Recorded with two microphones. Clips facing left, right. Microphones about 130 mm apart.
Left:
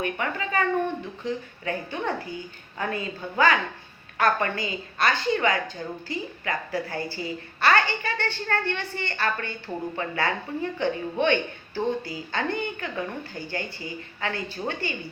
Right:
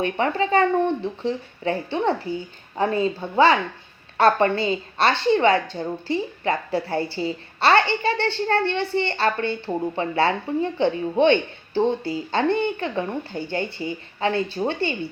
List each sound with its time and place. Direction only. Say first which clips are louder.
0.0 s a woman's voice: right 7 dB; 30° right (ahead or behind)